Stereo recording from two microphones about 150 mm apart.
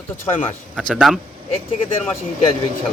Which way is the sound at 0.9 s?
Centre (ahead or behind).